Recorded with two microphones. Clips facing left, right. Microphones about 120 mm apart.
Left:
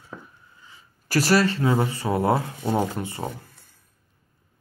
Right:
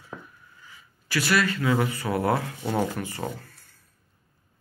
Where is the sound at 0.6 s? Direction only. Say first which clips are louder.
Even; 25° left (ahead or behind).